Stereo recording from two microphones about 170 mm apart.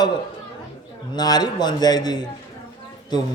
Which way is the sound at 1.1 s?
25° left (ahead or behind).